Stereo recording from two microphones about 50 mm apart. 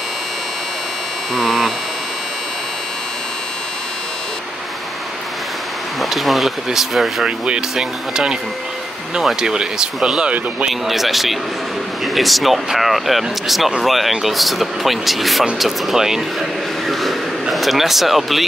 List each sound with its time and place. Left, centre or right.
1.3 s hum: centre
5.9 s speech: centre
7.2 s speech: centre
10.7 s speech: centre